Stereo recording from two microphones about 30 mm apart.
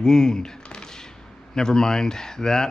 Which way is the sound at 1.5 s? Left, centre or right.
Left.